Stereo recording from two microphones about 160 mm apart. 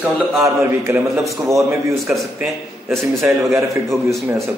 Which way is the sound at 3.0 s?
15° right (ahead or behind).